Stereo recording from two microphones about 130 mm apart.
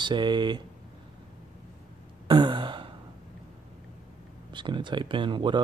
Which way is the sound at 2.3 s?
35° right (ahead or behind).